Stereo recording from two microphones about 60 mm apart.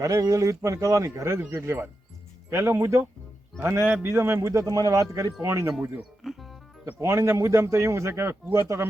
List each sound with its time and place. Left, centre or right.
0.0 s speech: right
4.0 s speech: right
6.2 s music: centre
7.0 s speech: right